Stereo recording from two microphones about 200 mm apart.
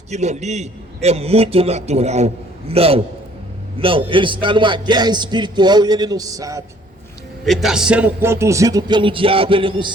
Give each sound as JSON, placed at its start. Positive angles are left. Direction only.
{"t": 0.1, "sound": "a man's voice", "side_deg": -35}
{"t": 7.4, "sound": "speech", "side_deg": 0}